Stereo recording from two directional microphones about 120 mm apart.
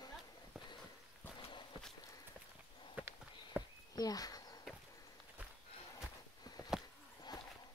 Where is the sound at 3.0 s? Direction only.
15° right (ahead or behind).